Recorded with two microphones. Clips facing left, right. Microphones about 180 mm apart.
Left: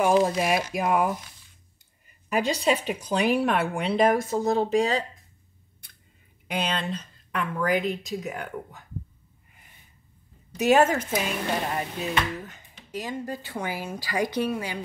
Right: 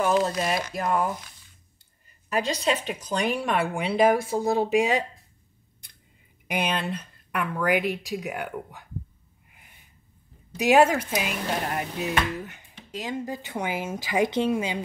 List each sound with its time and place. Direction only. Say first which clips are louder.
0.0 s speech: left 2 dB; 10° left (ahead or behind)
2.5 s speech: left 2 dB; 10° left (ahead or behind); by 5.0 s 10° right (ahead or behind)
6.4 s speech: right 1 dB; 15° right (ahead or behind)
10.5 s speech: right 1 dB; 10° right (ahead or behind)
13.0 s speech: right 2 dB; 15° right (ahead or behind)